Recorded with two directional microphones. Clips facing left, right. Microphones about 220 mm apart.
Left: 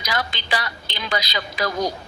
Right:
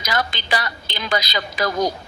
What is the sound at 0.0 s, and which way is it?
A woman's voice, 45° right (ahead or behind).